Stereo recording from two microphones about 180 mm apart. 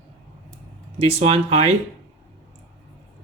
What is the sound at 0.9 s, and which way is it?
Speech, 35° right (ahead or behind).